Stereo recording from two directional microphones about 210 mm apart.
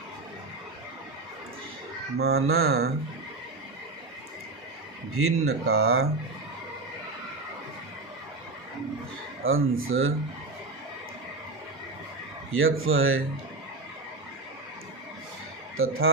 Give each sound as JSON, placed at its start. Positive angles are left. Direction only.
{"t": 2.1, "sound": "mantra", "side_deg": -50}
{"t": 5.1, "sound": "speech", "side_deg": -90}
{"t": 9.4, "sound": "speech", "side_deg": -70}
{"t": 12.5, "sound": "speech", "side_deg": -75}
{"t": 15.8, "sound": "speech", "side_deg": -75}